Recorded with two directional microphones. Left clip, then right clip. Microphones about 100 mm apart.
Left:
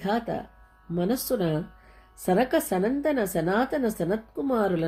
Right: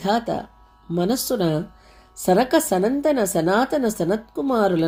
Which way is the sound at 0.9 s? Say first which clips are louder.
Right 5 dB; 55° right (ahead or behind).